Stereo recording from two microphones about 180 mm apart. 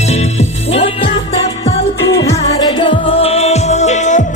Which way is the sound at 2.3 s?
30° left (ahead or behind).